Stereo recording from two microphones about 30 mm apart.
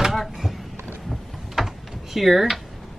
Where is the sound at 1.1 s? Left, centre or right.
Centre.